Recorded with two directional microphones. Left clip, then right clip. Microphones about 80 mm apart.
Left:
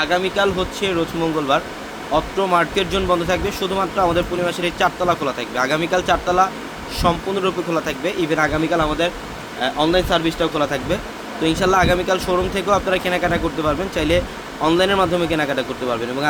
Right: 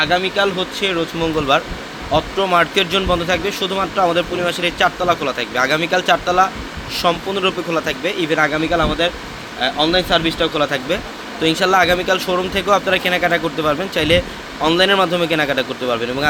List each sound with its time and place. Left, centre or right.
0.0 s speech: centre
1.2 s speech: right
3.2 s speech: right